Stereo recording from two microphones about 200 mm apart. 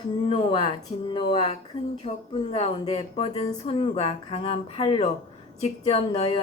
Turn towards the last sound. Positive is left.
turn(degrees=30)  # may be behind; listen again after turning